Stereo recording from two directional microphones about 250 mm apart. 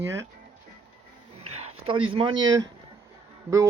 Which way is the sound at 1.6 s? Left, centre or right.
Right.